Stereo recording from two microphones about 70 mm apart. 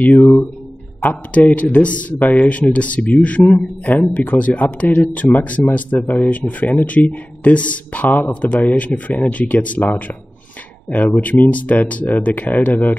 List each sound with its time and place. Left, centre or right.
1.0 s speech: left